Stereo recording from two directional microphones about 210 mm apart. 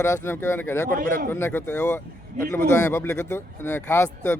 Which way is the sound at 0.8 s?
40° right (ahead or behind).